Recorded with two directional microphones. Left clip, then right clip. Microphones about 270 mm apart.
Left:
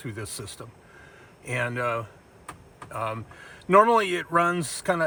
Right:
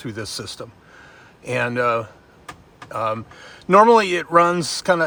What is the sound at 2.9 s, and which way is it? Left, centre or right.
Speech, centre.